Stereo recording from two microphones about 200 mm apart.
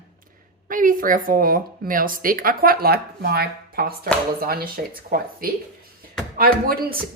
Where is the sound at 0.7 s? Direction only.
40° right (ahead or behind).